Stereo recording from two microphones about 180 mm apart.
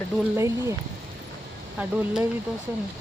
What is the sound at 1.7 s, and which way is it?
Speech, 5° right (ahead or behind).